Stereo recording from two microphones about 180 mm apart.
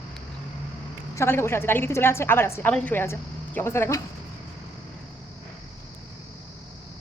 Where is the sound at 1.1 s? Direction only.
15° left (ahead or behind).